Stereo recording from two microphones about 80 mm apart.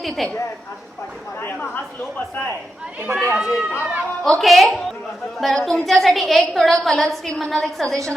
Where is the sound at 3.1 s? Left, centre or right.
Right.